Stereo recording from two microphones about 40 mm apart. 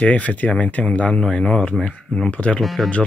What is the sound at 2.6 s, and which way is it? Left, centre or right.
Speech, centre.